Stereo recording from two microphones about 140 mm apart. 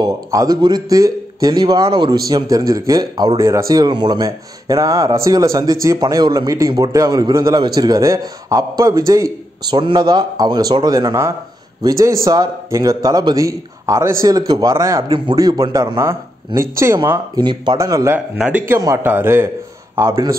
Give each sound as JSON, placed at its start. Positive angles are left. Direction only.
{"t": 0.0, "sound": "speech", "side_deg": -25}
{"t": 17.4, "sound": "speech", "side_deg": -35}
{"t": 17.7, "sound": "speech", "side_deg": -25}
{"t": 18.4, "sound": "a man's voice", "side_deg": -10}
{"t": 18.8, "sound": "a man's voice", "side_deg": -20}